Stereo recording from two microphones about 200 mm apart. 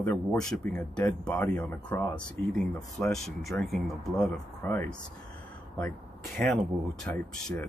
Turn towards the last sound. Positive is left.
turn(degrees=5)  # may be behind; listen again after turning